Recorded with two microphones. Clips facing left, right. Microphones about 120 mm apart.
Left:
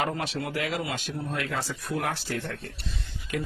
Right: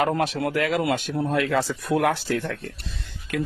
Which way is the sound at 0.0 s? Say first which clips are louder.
Right 7 dB; 55° right (ahead or behind).